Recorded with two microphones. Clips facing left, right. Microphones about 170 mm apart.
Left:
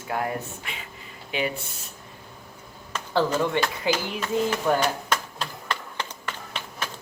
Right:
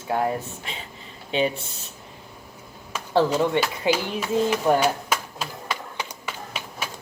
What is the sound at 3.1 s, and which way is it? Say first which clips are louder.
Speech: right 3 dB; 20° right (ahead or behind).